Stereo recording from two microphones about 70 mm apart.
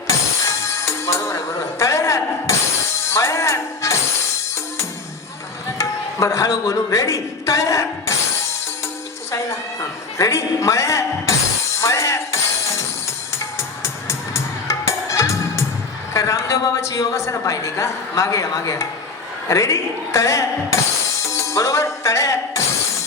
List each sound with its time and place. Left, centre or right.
0.1 s music: left
3.1 s speech: left
5.7 s speech: left
9.3 s a woman's voice: left
11.8 s music: left
16.1 s a woman's voice: left